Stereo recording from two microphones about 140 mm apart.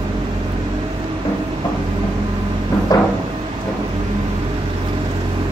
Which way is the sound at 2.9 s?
25° left (ahead or behind).